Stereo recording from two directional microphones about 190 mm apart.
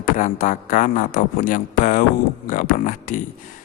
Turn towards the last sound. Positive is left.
turn(degrees=45)  # may be behind; listen again after turning